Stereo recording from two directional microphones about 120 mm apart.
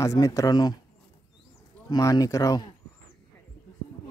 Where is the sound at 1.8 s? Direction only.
30° left (ahead or behind).